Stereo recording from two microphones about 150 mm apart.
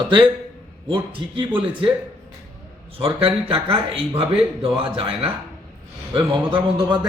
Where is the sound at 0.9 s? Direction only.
35° right (ahead or behind).